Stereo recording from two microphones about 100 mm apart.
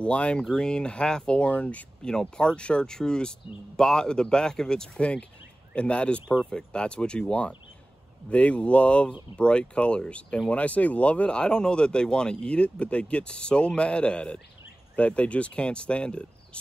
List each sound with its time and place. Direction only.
0.0 s speech: 10° left (ahead or behind)
6.2 s speech: 15° right (ahead or behind)
6.5 s speech: 10° left (ahead or behind)